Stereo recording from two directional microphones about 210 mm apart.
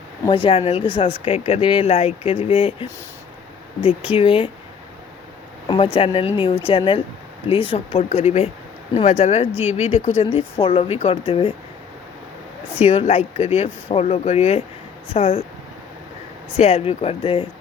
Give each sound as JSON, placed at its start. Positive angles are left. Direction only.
{"t": 0.3, "sound": "speech", "side_deg": 25}
{"t": 4.1, "sound": "speech", "side_deg": 25}
{"t": 5.6, "sound": "speech", "side_deg": 25}
{"t": 12.7, "sound": "speech", "side_deg": 30}
{"t": 16.6, "sound": "speech", "side_deg": 30}